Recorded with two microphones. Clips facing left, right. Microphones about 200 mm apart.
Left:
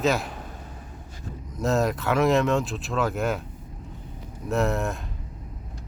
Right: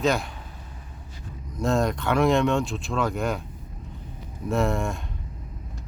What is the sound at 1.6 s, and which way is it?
Speech, 5° left (ahead or behind).